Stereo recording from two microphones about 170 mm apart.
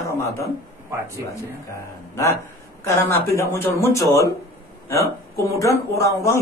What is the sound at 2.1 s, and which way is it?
A man's voice, 15° left (ahead or behind).